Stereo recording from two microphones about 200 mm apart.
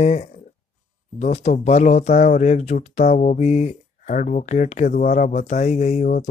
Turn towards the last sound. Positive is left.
turn(degrees=35)  # may be behind; listen again after turning